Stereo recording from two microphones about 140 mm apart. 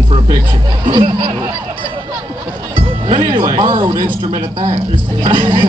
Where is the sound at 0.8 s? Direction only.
35° right (ahead or behind).